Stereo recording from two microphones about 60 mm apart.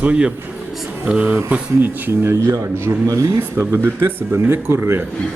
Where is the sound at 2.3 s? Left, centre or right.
Right.